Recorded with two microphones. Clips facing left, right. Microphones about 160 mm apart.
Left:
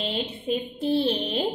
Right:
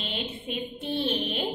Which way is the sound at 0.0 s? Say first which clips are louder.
Left 5 dB; 35° left (ahead or behind).